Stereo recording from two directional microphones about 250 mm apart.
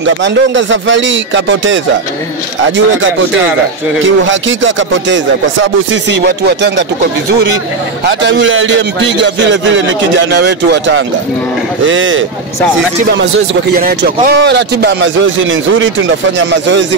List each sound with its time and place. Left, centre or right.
0.2 s speech: right
4.0 s speech: right
8.2 s speech: right
13.7 s speech: right